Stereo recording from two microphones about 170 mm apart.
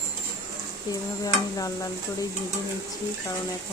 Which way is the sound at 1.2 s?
20° left (ahead or behind).